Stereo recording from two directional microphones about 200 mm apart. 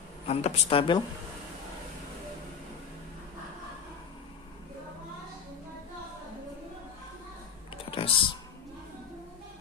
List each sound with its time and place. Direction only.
0.3 s speech: 30° left (ahead or behind)
7.7 s clicking: 25° left (ahead or behind)